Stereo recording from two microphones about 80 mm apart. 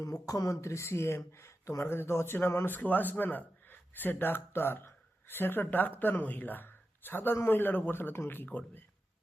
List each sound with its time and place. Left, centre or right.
0.0 s speech: left
8.4 s speech: centre